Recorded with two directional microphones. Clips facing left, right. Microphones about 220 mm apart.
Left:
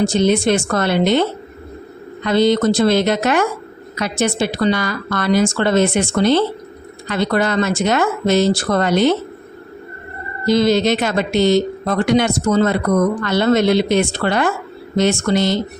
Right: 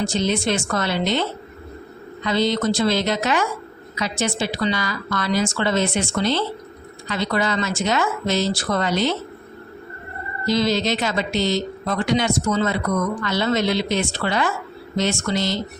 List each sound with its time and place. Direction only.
0.0 s speech: 55° left (ahead or behind)
10.4 s speech: 55° left (ahead or behind)